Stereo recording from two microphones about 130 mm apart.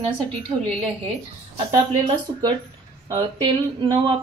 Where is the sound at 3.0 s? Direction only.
30° right (ahead or behind).